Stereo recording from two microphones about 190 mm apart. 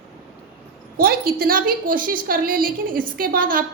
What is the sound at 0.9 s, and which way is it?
A woman's voice, 50° right (ahead or behind).